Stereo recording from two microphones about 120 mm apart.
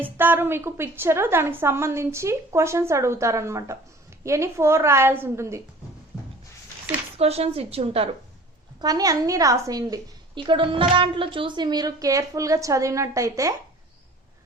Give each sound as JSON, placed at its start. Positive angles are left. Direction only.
{"t": 0.0, "sound": "a woman's voice", "side_deg": -15}
{"t": 7.2, "sound": "a woman's voice", "side_deg": -60}
{"t": 8.8, "sound": "a woman's voice", "side_deg": -30}